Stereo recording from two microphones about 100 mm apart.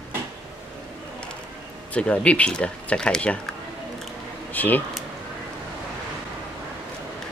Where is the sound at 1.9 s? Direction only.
10° left (ahead or behind).